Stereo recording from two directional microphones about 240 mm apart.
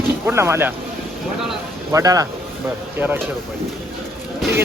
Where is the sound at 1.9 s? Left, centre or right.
Centre.